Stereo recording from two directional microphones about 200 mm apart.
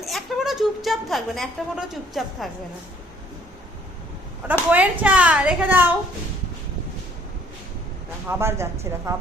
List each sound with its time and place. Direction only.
0.0 s a woman's voice: centre (ahead or behind)
4.7 s a woman's voice: 10° right (ahead or behind)
8.3 s a woman's voice: 10° right (ahead or behind)